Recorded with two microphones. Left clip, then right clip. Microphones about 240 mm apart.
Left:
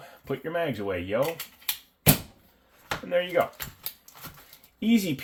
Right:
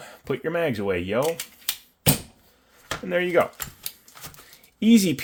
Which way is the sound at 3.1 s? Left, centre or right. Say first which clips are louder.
Right 3 dB; right.